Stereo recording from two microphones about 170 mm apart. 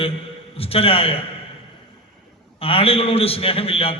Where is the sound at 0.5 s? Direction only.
35° left (ahead or behind).